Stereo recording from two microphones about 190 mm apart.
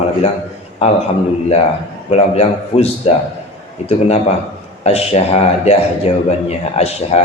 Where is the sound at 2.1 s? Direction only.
30° left (ahead or behind).